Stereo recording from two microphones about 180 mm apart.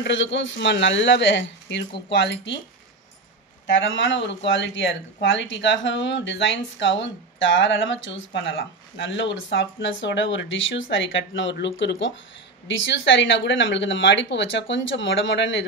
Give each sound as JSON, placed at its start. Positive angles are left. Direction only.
{"t": 0.0, "sound": "speech", "side_deg": 90}
{"t": 2.0, "sound": "speech", "side_deg": 75}
{"t": 3.6, "sound": "speech", "side_deg": 90}